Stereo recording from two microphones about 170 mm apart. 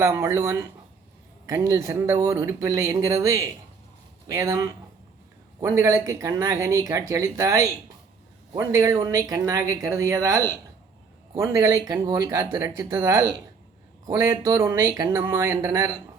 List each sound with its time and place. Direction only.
0.0 s speech: 15° right (ahead or behind)